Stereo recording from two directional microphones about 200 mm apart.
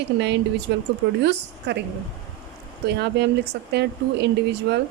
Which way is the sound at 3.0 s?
55° right (ahead or behind).